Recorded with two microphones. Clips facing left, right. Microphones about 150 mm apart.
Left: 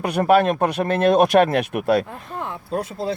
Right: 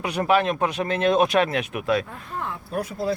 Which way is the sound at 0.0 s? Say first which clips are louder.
Left 5 dB; 50° left (ahead or behind).